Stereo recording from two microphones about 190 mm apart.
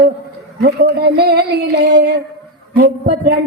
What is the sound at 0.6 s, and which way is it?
A woman's voice, 55° right (ahead or behind).